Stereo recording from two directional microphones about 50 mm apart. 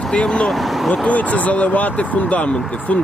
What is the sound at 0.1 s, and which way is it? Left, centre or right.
Speech, left.